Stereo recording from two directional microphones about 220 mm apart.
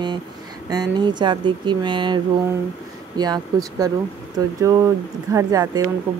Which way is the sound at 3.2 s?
15° right (ahead or behind).